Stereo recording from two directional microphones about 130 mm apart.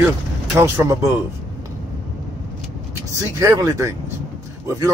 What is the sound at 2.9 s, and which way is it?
Speech, 25° right (ahead or behind).